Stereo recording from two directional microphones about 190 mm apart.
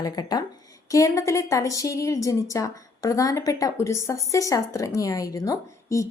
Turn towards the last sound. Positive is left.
turn(degrees=15)  # may be behind; listen again after turning